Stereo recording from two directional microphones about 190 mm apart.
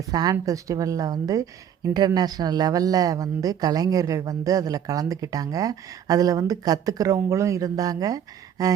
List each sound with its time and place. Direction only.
0.1 s a woman's voice: 20° right (ahead or behind)